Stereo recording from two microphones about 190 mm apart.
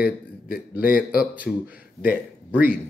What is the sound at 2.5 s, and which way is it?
Speech, 10° right (ahead or behind).